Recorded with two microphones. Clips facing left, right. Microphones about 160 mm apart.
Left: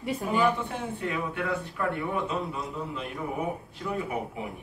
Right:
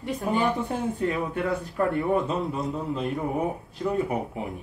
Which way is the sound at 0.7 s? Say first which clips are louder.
Right 6 dB; 40° right (ahead or behind).